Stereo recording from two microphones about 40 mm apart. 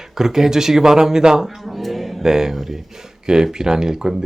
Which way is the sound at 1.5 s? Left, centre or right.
Centre.